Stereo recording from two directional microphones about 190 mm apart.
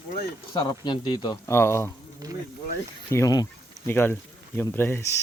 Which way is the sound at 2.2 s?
15° right (ahead or behind).